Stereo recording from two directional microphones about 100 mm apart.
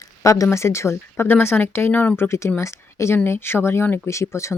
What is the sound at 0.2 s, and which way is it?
Speech, 30° left (ahead or behind).